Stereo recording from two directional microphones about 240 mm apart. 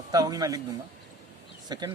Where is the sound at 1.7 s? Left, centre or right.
Centre.